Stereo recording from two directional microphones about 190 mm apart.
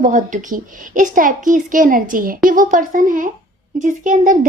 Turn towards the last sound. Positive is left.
turn(degrees=-40)  # may be behind; listen again after turning